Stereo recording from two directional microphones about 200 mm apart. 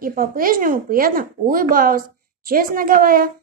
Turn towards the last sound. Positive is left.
turn(degrees=-45)  # may be behind; listen again after turning